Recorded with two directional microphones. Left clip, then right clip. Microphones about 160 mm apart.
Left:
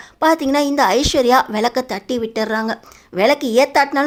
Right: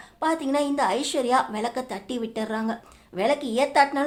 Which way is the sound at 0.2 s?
40° left (ahead or behind).